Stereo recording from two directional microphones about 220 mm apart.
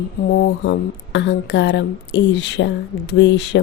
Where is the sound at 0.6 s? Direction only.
55° left (ahead or behind).